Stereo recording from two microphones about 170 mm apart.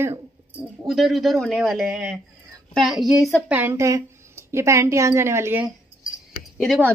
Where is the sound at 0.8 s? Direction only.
Centre (ahead or behind).